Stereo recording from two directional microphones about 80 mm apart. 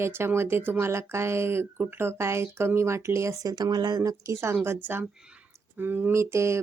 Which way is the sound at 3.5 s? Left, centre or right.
Right.